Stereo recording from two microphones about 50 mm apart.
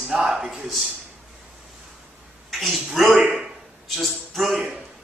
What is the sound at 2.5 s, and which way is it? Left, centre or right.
A man's voice, centre.